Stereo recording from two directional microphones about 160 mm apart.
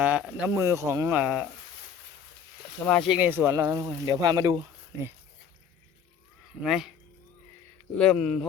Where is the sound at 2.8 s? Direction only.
10° left (ahead or behind).